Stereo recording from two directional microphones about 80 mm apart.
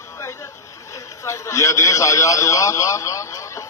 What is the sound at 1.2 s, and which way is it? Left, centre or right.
A man's voice, left.